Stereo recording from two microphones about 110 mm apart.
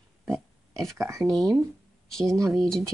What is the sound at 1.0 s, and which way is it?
Speech, 30° right (ahead or behind).